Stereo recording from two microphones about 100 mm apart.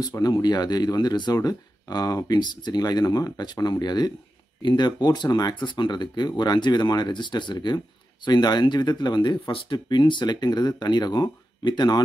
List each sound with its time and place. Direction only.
0.0 s speech: 40° left (ahead or behind)